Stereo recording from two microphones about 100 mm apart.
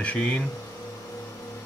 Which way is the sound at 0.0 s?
15° left (ahead or behind).